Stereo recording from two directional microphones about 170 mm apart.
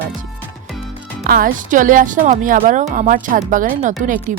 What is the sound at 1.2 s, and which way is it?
Speech, 60° right (ahead or behind).